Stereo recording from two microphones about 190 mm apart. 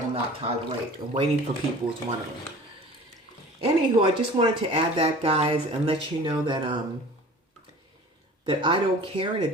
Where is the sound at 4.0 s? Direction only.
25° right (ahead or behind).